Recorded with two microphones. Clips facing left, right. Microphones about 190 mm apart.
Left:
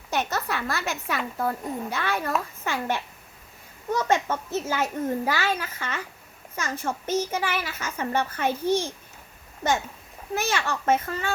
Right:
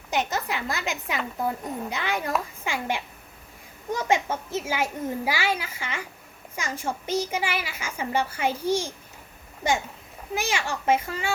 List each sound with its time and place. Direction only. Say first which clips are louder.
0.1 s a woman's voice: even; 15° right (ahead or behind)
10.3 s a woman's voice: left 1 dB; 10° right (ahead or behind)